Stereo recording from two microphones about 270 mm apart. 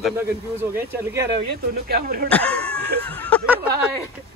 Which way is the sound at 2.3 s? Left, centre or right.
Centre.